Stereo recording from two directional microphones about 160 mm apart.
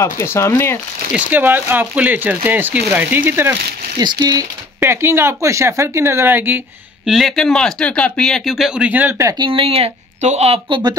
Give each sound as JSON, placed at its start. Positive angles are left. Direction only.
{"t": 0.0, "sound": "speech", "side_deg": 15}
{"t": 1.1, "sound": "speech", "side_deg": -10}
{"t": 4.0, "sound": "speech", "side_deg": -25}
{"t": 7.1, "sound": "speech", "side_deg": 0}
{"t": 9.3, "sound": "speech", "side_deg": -30}